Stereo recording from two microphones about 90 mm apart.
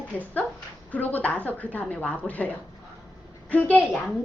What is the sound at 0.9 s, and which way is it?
A woman's voice, 15° left (ahead or behind).